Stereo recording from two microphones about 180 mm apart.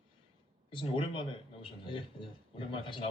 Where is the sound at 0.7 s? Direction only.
30° left (ahead or behind).